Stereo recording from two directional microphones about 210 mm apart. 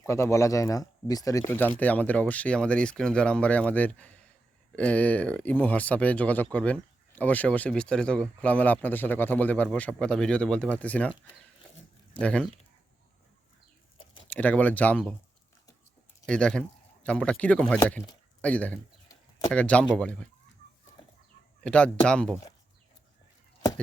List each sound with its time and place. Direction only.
0.0 s speech: 15° left (ahead or behind)
12.2 s speech: 5° left (ahead or behind)
14.3 s speech: 5° left (ahead or behind)
16.2 s speech: 5° left (ahead or behind)
18.4 s chicken: 5° left (ahead or behind)
19.5 s speech: 5° left (ahead or behind)
21.6 s speech: 5° left (ahead or behind)